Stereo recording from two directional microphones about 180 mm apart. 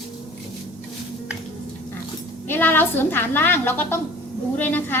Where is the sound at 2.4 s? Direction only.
10° left (ahead or behind).